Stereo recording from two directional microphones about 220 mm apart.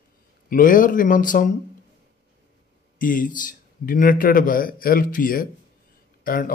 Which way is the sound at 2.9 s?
40° left (ahead or behind).